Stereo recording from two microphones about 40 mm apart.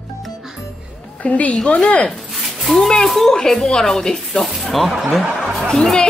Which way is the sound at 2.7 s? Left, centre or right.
Centre.